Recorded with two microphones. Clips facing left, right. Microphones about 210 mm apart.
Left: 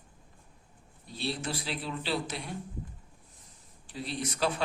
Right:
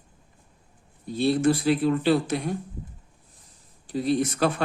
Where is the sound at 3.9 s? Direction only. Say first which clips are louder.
Right 12 dB; 45° right (ahead or behind).